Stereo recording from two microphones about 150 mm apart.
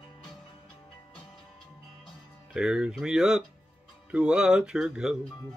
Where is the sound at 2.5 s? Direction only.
5° right (ahead or behind).